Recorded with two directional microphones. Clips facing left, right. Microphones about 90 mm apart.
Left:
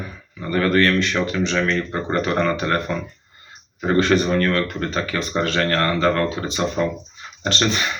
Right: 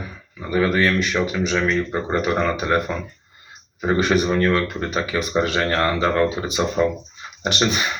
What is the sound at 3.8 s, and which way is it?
Speech, 15° right (ahead or behind).